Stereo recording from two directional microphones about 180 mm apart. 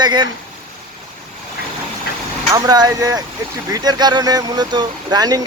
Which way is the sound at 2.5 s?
20° right (ahead or behind).